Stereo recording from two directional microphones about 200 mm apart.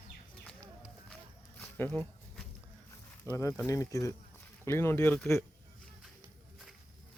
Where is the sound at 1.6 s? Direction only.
10° left (ahead or behind).